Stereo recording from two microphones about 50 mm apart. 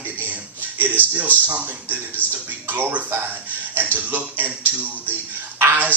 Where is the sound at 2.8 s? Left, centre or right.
Right.